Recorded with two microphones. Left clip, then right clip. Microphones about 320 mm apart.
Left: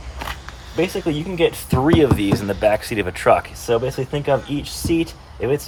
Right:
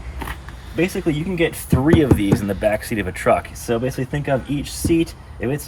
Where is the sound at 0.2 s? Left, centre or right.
Centre.